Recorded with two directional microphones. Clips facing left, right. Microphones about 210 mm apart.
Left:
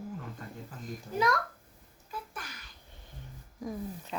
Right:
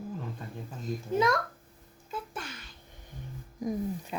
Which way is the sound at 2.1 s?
25° right (ahead or behind).